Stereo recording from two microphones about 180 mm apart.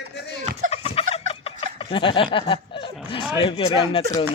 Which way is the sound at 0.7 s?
30° left (ahead or behind).